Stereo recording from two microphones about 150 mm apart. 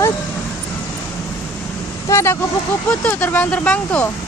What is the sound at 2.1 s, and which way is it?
Speech, 20° left (ahead or behind).